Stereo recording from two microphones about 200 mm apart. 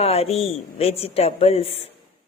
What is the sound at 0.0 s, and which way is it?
A woman's voice, 30° left (ahead or behind).